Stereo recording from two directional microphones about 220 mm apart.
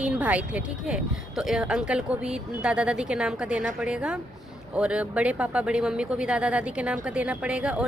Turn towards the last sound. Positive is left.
turn(degrees=-5)  # may be behind; listen again after turning